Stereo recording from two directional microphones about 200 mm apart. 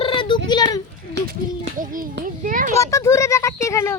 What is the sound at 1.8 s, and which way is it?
Child singing, 45° right (ahead or behind).